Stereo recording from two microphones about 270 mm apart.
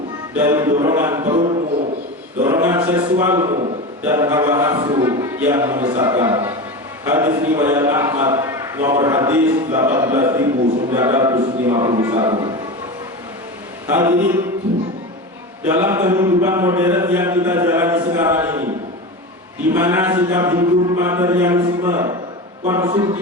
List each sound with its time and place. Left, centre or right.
0.3 s a man's voice: centre
13.8 s a man's voice: centre
15.6 s a man's voice: centre
19.7 s a man's voice: centre